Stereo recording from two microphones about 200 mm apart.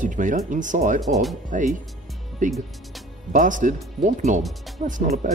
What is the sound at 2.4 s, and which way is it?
Speech, 40° right (ahead or behind).